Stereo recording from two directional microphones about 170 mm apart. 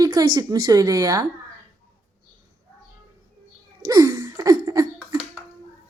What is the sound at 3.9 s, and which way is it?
Laughter, 20° right (ahead or behind).